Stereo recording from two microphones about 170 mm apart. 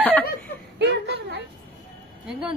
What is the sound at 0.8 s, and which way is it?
Whimper, 80° right.